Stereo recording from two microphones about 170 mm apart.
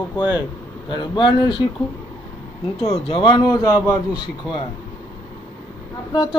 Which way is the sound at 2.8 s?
35° left (ahead or behind).